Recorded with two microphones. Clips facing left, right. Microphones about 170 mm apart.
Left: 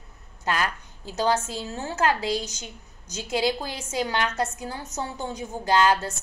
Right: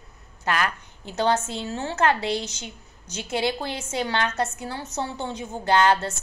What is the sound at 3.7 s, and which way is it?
A woman's voice, 15° left (ahead or behind).